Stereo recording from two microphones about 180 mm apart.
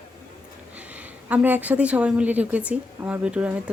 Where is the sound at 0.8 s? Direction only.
10° right (ahead or behind).